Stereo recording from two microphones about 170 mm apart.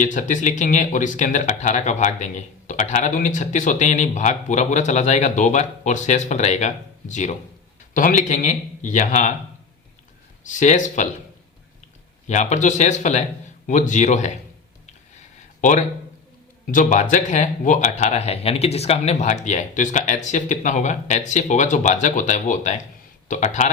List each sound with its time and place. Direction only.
0.0 s speech: 45° left (ahead or behind)
10.4 s speech: 45° left (ahead or behind)
12.3 s speech: 45° left (ahead or behind)
16.7 s speech: 45° left (ahead or behind)